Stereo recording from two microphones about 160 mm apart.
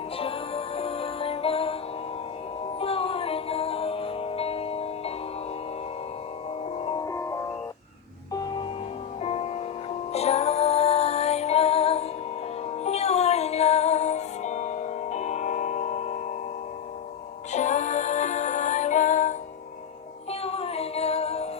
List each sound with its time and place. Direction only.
0.2 s music: 35° left (ahead or behind)
2.7 s music: 35° left (ahead or behind)
6.7 s music: 35° left (ahead or behind)
7.0 s music: 20° left (ahead or behind)
9.2 s music: 40° left (ahead or behind)
17.5 s music: 50° left (ahead or behind)
20.3 s music: 40° left (ahead or behind)